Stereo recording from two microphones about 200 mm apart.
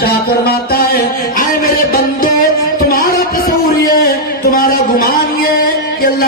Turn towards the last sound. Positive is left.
turn(degrees=45)  # may be behind; listen again after turning